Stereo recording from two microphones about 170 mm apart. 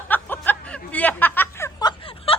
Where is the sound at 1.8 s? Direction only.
25° left (ahead or behind).